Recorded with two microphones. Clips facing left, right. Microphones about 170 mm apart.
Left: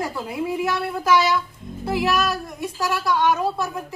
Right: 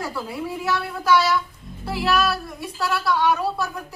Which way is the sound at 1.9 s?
15° left (ahead or behind).